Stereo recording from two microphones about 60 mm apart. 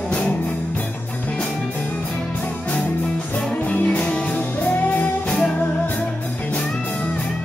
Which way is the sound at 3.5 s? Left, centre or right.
Left.